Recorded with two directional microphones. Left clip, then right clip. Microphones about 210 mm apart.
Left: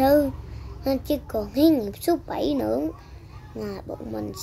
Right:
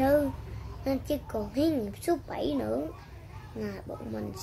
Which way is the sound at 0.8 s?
25° left (ahead or behind).